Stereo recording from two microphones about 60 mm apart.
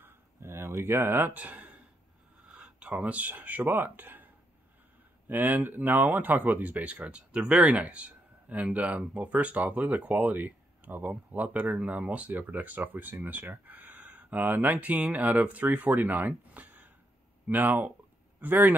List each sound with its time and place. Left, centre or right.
0.0 s a sound: right
2.4 s speech: right
5.3 s speech: right